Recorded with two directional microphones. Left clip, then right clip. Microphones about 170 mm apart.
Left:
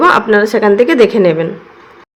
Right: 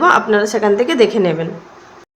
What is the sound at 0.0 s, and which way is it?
A woman's voice, 20° left (ahead or behind).